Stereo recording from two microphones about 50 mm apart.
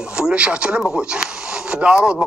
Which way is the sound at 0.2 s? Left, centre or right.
Right.